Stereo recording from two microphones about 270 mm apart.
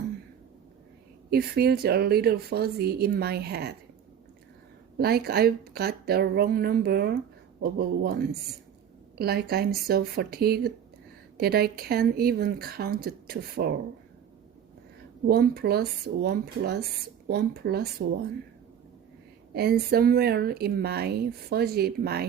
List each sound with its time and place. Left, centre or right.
1.3 s speech: right
4.9 s speech: right
15.3 s speech: right
19.5 s speech: right